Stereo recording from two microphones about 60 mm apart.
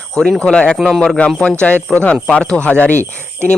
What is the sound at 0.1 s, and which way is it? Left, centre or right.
Speech, centre.